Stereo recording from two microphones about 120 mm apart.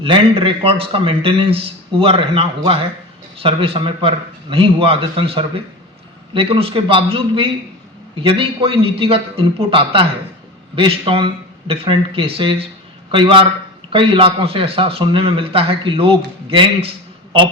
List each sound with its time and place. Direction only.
0.0 s a man's voice: 50° right (ahead or behind)